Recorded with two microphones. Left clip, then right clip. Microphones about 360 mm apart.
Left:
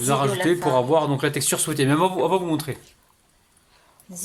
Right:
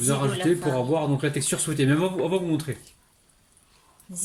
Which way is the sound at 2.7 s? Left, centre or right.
Left.